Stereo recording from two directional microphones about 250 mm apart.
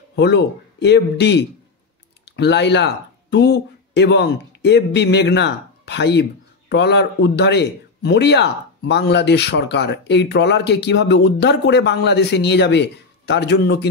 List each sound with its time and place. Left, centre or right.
0.1 s speech: left